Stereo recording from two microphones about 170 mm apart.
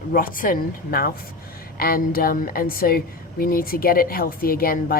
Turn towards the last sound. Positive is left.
turn(degrees=60)  # may be behind; listen again after turning